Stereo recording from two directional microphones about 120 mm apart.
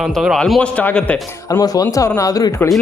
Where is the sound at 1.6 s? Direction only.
30° left (ahead or behind).